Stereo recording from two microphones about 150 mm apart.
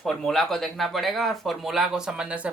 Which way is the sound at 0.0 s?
Centre (ahead or behind).